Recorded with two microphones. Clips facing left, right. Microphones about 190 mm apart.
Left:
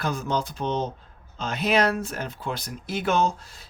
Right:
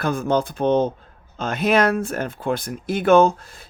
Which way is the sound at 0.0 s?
55° right (ahead or behind).